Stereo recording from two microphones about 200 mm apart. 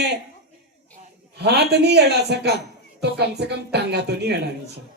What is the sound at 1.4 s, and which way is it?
Speech, 55° right (ahead or behind).